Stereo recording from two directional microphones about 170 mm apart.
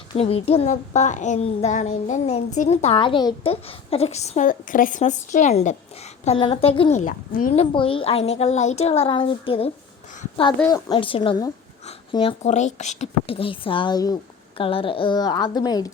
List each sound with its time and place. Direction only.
0.1 s a woman's voice: 35° left (ahead or behind)
6.2 s a woman's voice: 30° left (ahead or behind)
12.4 s a woman's voice: 45° left (ahead or behind); by 15.9 s 25° left (ahead or behind)